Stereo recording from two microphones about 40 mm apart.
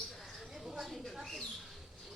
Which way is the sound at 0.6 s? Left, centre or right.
Centre.